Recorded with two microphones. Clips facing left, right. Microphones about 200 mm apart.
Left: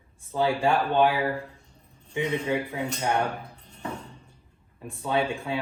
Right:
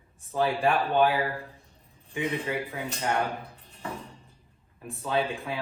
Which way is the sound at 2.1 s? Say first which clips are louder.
Left 3 dB; 30° left (ahead or behind).